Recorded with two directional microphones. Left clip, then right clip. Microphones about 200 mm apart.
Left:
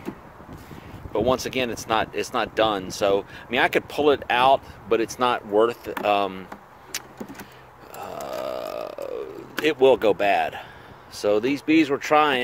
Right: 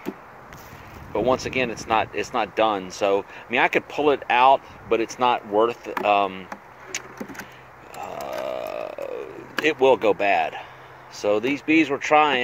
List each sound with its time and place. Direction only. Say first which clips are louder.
1.1 s speech: right 1 dB; 15° left (ahead or behind)
6.9 s vehicle: right 1 dB; 25° left (ahead or behind)
7.9 s a sound: right 1 dB; 25° left (ahead or behind)
11.1 s speech: even; 25° left (ahead or behind)